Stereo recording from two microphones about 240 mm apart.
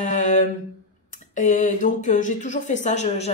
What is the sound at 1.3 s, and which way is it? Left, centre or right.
A woman's voice, left.